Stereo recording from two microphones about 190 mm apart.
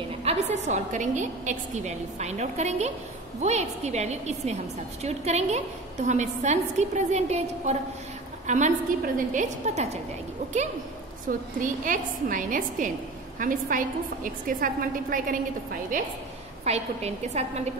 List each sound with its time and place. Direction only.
0.2 s a woman's voice: 35° right (ahead or behind)
11.2 s a woman's voice: 45° right (ahead or behind)
16.6 s a woman's voice: 35° right (ahead or behind)